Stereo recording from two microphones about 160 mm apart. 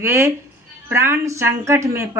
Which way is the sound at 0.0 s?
15° right (ahead or behind).